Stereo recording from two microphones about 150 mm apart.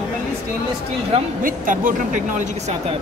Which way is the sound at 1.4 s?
65° right (ahead or behind).